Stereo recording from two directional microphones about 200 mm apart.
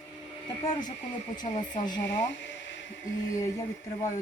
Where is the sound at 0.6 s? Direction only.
20° left (ahead or behind).